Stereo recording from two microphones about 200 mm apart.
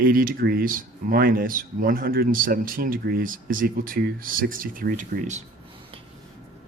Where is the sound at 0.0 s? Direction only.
45° right (ahead or behind).